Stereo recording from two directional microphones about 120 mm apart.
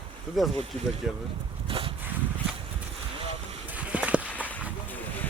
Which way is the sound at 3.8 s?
10° right (ahead or behind).